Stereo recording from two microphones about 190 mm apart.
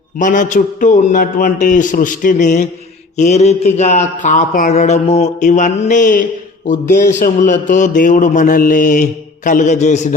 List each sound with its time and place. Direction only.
0.2 s a man's voice: 45° left (ahead or behind)
3.2 s mantra: 35° left (ahead or behind)